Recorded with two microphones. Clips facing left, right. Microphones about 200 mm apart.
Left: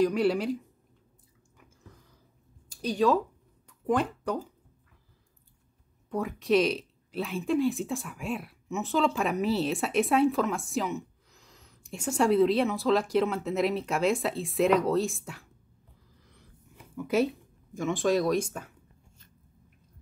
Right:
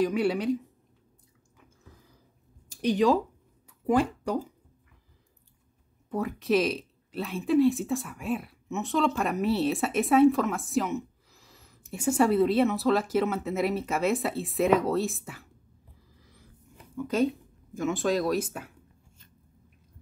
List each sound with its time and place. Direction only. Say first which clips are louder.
0.0 s speech: left 1 dB; centre (ahead or behind)
2.7 s speech: right 2 dB; 20° right (ahead or behind)
3.6 s a sound: right 3 dB; 10° right (ahead or behind)
6.0 s speech: even; centre (ahead or behind)
16.9 s speech: even; 10° left (ahead or behind)